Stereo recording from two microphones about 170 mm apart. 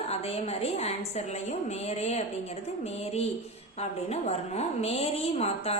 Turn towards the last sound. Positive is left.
turn(degrees=40)  # may be behind; listen again after turning